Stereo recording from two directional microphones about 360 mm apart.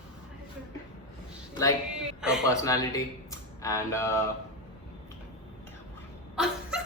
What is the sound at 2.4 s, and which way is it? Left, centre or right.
Speech, centre.